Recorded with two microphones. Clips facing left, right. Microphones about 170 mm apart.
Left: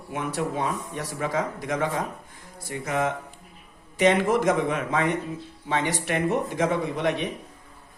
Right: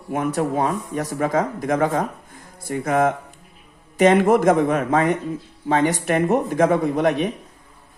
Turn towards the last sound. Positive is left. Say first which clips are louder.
# right 6 dB
turn(degrees=-50)  # may be behind; listen again after turning